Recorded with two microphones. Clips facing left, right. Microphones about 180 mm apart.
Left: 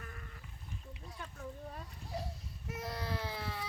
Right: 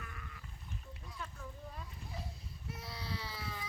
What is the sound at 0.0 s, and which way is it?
Sheep, 40° left (ahead or behind).